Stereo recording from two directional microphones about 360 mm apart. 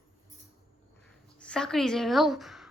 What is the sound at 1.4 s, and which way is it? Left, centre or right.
A woman's voice, centre.